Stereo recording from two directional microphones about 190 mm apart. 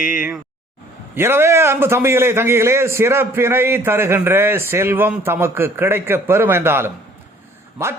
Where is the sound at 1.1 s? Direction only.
10° right (ahead or behind).